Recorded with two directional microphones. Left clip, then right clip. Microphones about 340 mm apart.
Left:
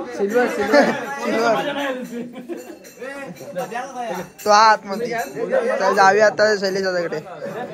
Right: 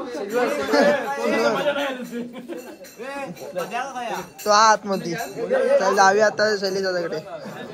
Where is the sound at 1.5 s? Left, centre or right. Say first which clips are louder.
Left 1 dB; centre.